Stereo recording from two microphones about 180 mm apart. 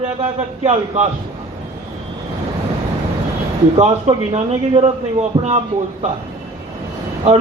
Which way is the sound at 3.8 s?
35° right (ahead or behind).